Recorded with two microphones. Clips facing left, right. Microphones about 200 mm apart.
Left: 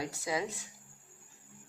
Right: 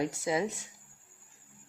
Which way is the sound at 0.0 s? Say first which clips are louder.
Right 5 dB; 25° right (ahead or behind).